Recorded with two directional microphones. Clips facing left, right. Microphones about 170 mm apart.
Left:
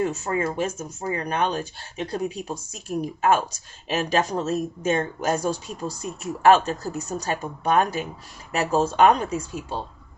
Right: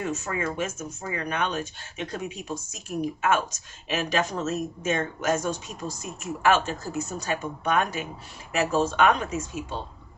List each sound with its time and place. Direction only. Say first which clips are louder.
0.0 s a woman's voice: left 5 dB; 35° left (ahead or behind)